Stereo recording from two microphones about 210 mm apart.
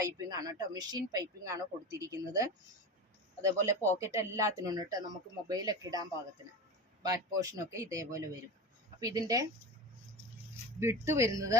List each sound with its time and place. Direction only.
0.0 s speech: 15° right (ahead or behind)
7.3 s speech: 15° right (ahead or behind)
10.8 s speech: 10° right (ahead or behind)